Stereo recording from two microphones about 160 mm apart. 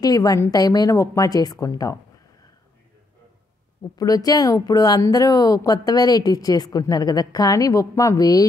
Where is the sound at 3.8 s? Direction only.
20° left (ahead or behind).